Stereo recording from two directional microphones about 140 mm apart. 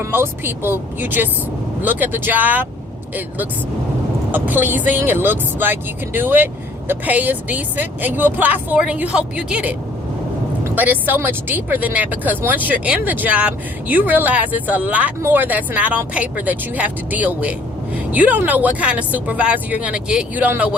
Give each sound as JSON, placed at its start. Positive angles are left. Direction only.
{"t": 0.0, "sound": "speech", "side_deg": -15}
{"t": 4.3, "sound": "speech", "side_deg": -15}